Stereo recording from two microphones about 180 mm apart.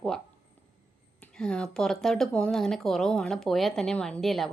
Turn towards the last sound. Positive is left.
turn(degrees=0)  # may be behind; listen again after turning